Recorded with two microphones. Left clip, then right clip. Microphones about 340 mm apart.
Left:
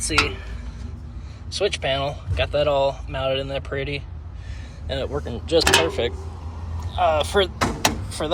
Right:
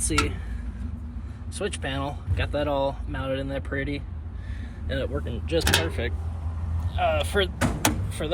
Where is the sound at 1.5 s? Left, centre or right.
Centre.